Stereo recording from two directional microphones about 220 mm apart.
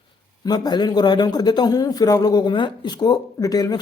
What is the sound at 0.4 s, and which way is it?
A man's voice, 20° left (ahead or behind).